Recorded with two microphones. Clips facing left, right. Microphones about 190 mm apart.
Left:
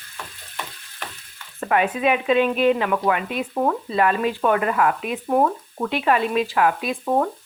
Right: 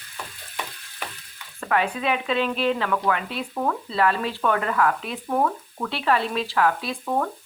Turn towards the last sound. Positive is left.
turn(degrees=20)  # may be behind; listen again after turning